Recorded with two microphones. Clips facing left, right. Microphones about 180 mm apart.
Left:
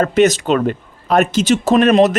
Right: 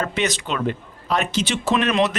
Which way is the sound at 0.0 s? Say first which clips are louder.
Left 11 dB; 45° left (ahead or behind).